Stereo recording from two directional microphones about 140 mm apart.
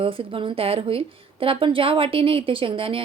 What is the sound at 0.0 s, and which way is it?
A woman's voice, 40° right (ahead or behind).